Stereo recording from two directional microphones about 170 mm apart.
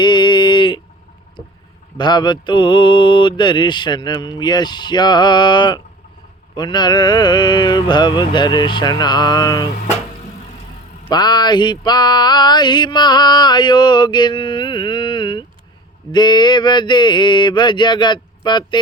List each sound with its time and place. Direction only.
0.0 s a sound: 25° left (ahead or behind)
2.0 s male singing: 25° left (ahead or behind)
11.1 s male singing: 25° left (ahead or behind)